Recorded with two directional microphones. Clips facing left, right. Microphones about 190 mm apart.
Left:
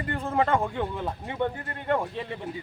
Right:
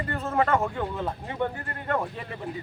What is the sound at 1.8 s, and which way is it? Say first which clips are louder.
Speech: left 2 dB; 15° left (ahead or behind).